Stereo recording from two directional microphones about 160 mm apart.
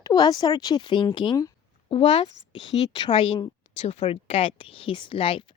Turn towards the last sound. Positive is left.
turn(degrees=35)  # may be behind; listen again after turning